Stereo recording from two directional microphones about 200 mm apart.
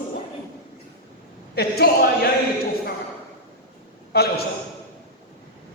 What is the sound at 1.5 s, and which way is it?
Speech, 50° left (ahead or behind).